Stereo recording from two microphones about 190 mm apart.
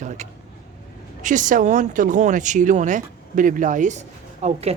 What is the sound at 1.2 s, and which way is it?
Speech, 40° right (ahead or behind).